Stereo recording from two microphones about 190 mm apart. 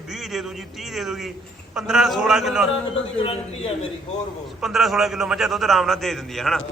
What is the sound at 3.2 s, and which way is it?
Speech, 30° left (ahead or behind).